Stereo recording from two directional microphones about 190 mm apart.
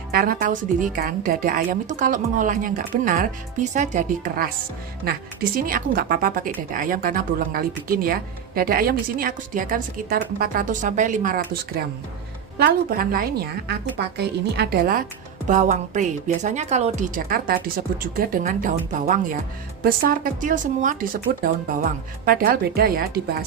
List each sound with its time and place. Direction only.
0.1 s speech: 50° right (ahead or behind)
12.5 s a woman's voice: 55° right (ahead or behind)
15.4 s a woman's voice: 40° right (ahead or behind)